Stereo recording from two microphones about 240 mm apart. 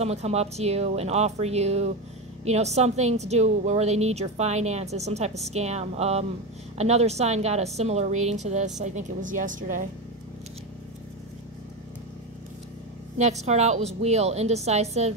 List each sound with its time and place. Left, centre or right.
0.0 s a woman's voice: right
13.2 s a woman's voice: right